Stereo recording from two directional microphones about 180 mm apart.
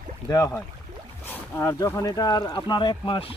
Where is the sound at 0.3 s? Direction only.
20° left (ahead or behind).